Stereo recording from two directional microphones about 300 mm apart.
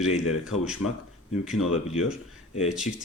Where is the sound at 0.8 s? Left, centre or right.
Left.